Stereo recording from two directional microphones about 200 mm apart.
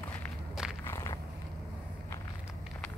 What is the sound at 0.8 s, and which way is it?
Walk, 15° left (ahead or behind).